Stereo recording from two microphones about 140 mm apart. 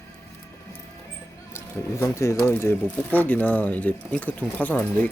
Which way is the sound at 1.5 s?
20° left (ahead or behind).